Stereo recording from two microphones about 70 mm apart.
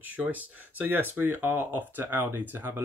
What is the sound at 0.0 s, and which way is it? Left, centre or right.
Speech, right.